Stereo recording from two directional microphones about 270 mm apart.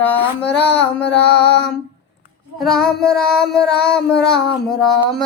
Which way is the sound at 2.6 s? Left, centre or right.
Centre.